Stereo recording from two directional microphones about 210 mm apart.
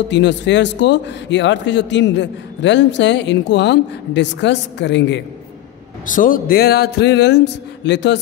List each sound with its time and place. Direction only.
0.1 s a man's voice: 55° left (ahead or behind)
6.0 s a man's voice: 40° left (ahead or behind); by 8.2 s 55° left (ahead or behind)